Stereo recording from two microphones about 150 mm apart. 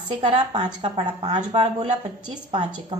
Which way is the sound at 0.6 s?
40° right (ahead or behind).